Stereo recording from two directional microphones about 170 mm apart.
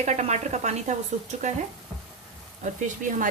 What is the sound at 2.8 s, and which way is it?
Speech, 50° right (ahead or behind).